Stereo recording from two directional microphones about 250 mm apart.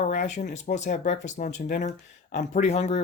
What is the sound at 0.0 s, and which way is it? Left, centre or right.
Speech, left.